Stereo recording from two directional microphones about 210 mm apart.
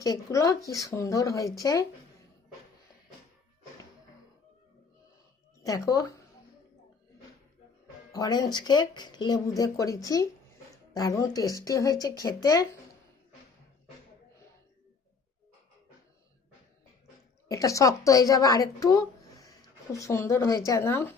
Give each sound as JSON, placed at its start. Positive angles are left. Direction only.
{"t": 0.0, "sound": "speech", "side_deg": 15}
{"t": 5.6, "sound": "speech", "side_deg": 15}
{"t": 8.1, "sound": "speech", "side_deg": 20}
{"t": 17.5, "sound": "speech", "side_deg": 15}